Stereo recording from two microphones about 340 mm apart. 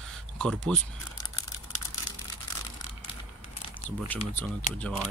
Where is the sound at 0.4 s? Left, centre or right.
Centre.